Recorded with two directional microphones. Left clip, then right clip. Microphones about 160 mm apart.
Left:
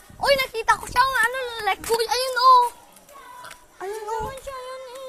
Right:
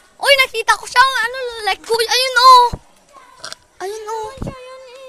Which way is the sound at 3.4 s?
75° right (ahead or behind).